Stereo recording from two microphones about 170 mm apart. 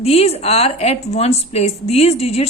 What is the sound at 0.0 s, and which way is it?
A woman's voice, 35° left (ahead or behind).